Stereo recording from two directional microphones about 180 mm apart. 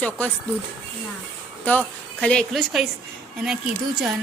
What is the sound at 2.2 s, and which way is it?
A woman's voice, 5° left (ahead or behind).